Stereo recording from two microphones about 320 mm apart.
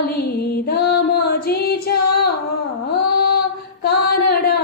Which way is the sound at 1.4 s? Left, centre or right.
Left.